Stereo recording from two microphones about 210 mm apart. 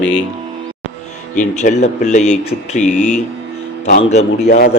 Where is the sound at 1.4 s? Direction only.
35° left (ahead or behind).